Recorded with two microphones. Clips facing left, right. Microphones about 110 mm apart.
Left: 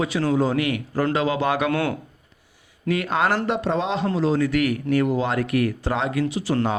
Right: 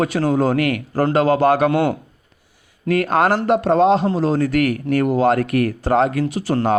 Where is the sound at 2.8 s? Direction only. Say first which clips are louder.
Right 5 dB; 45° right (ahead or behind).